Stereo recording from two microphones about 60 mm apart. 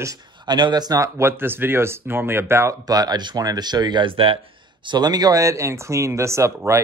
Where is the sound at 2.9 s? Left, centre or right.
Right.